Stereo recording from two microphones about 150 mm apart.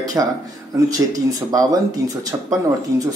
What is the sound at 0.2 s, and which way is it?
Speech, 20° right (ahead or behind).